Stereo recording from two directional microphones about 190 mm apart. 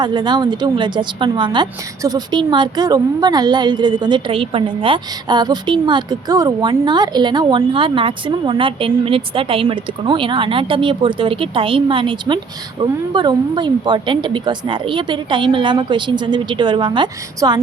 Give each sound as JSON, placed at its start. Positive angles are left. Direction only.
{"t": 0.0, "sound": "a woman's voice", "side_deg": -20}